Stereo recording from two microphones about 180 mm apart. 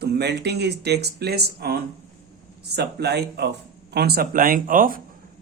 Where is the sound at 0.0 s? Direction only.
70° right (ahead or behind); by 5.0 s 50° right (ahead or behind).